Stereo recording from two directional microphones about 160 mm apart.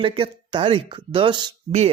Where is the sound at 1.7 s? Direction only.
45° right (ahead or behind).